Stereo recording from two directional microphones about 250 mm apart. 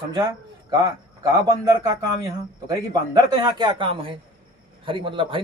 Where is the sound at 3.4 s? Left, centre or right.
Centre.